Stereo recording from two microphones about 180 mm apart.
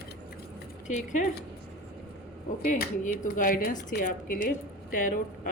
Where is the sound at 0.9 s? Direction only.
45° left (ahead or behind).